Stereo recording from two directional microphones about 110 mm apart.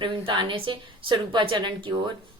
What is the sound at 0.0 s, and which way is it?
A woman's voice, 50° right (ahead or behind).